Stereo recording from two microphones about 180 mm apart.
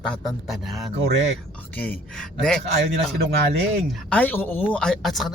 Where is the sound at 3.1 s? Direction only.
65° right (ahead or behind).